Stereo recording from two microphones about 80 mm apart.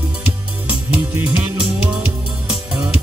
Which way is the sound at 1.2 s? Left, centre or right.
Centre.